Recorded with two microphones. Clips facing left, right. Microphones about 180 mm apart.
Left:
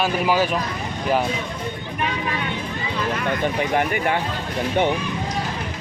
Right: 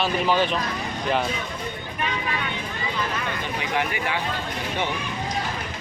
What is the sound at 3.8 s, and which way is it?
Speech, 50° left (ahead or behind).